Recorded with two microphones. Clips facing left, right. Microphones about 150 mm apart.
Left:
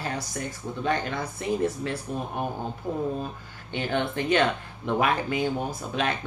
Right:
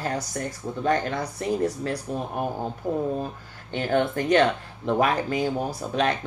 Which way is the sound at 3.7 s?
40° right (ahead or behind).